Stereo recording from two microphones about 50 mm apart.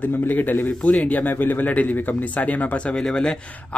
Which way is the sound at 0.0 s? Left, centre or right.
Left.